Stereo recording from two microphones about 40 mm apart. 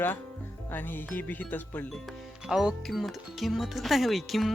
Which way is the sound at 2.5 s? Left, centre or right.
Centre.